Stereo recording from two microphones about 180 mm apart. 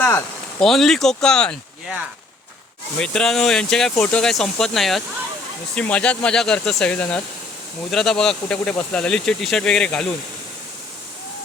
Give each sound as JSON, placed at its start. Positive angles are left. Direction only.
{"t": 0.6, "sound": "speech", "side_deg": 0}
{"t": 3.0, "sound": "speech", "side_deg": 5}